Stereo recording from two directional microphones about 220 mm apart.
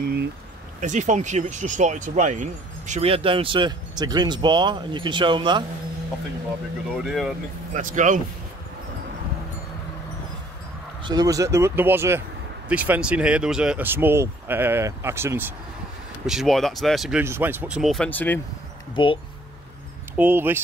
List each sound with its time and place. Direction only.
0.0 s a sound: 45° right (ahead or behind)
0.7 s speech: 35° right (ahead or behind)
7.0 s speech: centre (ahead or behind)
7.7 s speech: 35° right (ahead or behind)
11.1 s speech: 15° right (ahead or behind); by 18.4 s 10° left (ahead or behind)
19.0 s speech: 20° left (ahead or behind)
20.2 s speech: 10° right (ahead or behind)